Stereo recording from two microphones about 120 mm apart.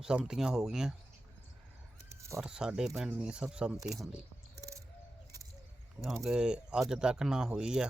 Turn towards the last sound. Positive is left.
turn(degrees=-5)  # may be behind; listen again after turning